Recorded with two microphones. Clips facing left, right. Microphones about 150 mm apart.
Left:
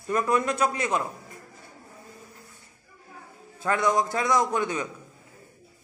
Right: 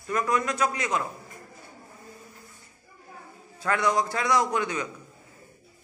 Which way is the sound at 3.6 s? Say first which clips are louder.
Left 1 dB; 20° left (ahead or behind).